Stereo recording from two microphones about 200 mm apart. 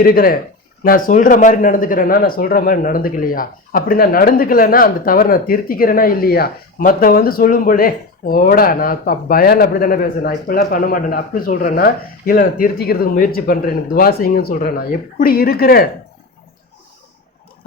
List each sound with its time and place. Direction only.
0.0 s speech: 45° left (ahead or behind)